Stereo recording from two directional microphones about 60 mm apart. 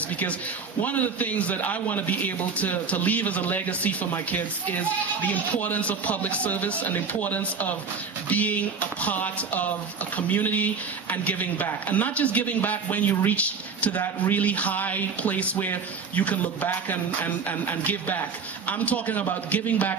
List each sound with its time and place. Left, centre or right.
0.8 s speech: left